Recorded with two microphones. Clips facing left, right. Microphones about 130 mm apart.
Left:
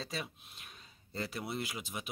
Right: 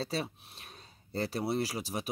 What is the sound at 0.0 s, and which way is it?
A man's voice, 30° right (ahead or behind).